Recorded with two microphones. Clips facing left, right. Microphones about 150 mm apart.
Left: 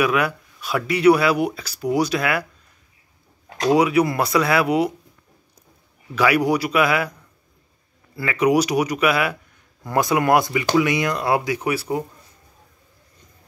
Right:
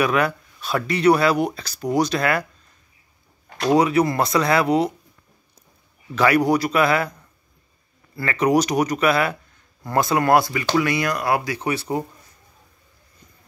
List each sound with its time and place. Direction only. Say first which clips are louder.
0.0 s speech: even; 10° left (ahead or behind)
3.6 s speech: even; 10° left (ahead or behind)
6.1 s speech: right 1 dB; 10° left (ahead or behind)
8.2 s speech: left 1 dB; 10° left (ahead or behind)